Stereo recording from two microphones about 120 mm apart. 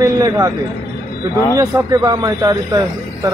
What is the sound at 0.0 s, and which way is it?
Speech, 30° right (ahead or behind).